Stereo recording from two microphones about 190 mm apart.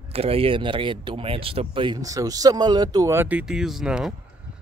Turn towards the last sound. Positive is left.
turn(degrees=-5)  # may be behind; listen again after turning